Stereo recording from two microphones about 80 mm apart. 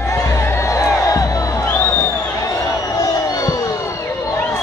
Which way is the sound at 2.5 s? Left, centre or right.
Left.